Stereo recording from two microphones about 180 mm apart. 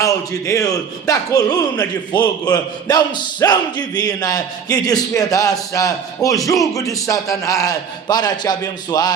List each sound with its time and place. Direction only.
0.0 s a man's voice: 20° left (ahead or behind)